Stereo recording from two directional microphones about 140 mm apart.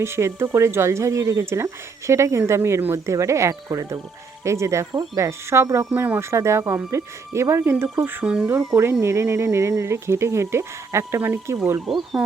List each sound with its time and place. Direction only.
0.0 s speech: 20° right (ahead or behind)